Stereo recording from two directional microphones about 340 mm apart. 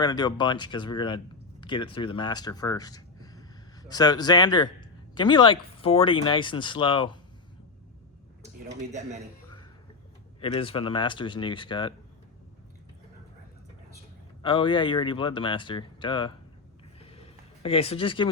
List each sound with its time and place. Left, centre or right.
0.0 s speech: centre
10.4 s speech: centre
14.4 s speech: centre
17.0 s a sound: centre